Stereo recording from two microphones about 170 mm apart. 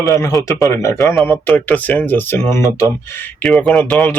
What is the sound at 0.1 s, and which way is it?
Speech, 15° left (ahead or behind).